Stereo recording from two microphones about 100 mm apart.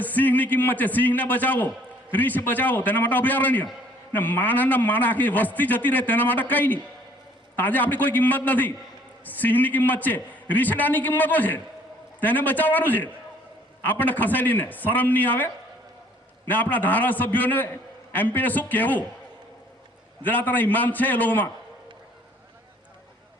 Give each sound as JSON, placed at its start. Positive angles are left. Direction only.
{"t": 0.0, "sound": "a man's voice", "side_deg": 15}
{"t": 16.5, "sound": "a man's voice", "side_deg": 15}
{"t": 20.2, "sound": "a man's voice", "side_deg": 20}